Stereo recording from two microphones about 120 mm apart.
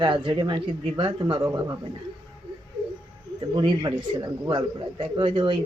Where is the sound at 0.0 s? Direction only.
40° right (ahead or behind).